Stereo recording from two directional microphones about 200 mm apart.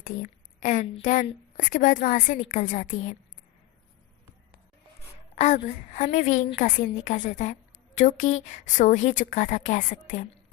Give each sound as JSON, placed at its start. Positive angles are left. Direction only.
{"t": 0.0, "sound": "a woman's voice", "side_deg": 40}
{"t": 5.3, "sound": "a woman's voice", "side_deg": 35}